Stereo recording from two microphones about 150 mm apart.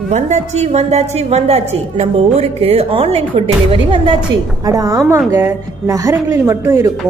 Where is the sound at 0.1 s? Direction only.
50° right (ahead or behind).